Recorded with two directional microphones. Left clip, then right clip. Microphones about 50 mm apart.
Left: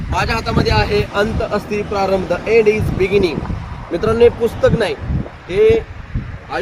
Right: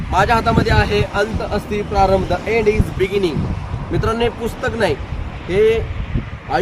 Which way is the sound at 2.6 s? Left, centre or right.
Right.